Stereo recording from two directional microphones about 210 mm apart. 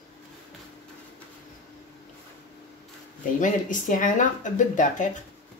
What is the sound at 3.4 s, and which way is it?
Speech, 40° left (ahead or behind).